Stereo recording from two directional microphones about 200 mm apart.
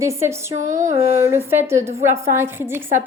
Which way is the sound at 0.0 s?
15° right (ahead or behind).